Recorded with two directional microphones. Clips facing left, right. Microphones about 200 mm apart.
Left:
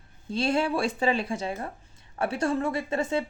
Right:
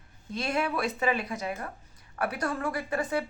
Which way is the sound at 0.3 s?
30° left (ahead or behind).